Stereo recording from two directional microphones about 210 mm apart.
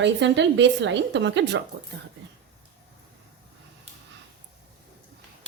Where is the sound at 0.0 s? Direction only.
60° right (ahead or behind).